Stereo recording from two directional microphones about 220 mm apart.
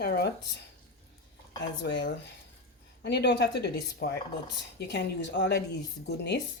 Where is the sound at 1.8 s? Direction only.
50° left (ahead or behind).